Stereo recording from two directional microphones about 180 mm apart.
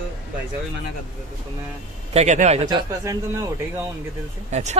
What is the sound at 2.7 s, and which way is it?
Speech, 25° right (ahead or behind).